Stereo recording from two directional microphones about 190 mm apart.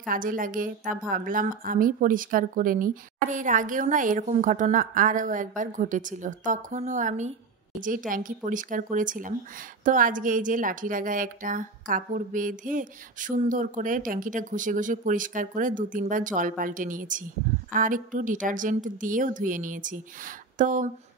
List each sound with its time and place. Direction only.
0.0 s a woman's voice: 45° right (ahead or behind)